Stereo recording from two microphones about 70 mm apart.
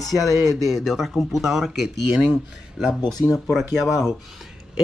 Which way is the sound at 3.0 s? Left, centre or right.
Left.